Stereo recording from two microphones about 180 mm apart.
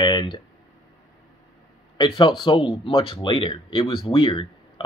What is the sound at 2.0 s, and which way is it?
Speech, 25° left (ahead or behind).